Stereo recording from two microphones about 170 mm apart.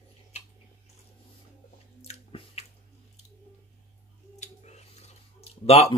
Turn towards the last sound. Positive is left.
turn(degrees=35)  # may be behind; listen again after turning